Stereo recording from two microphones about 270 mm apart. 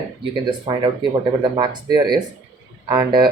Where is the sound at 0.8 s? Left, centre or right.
Centre.